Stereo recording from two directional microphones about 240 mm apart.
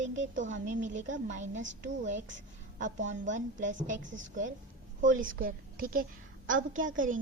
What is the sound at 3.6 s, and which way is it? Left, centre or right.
Speech, right.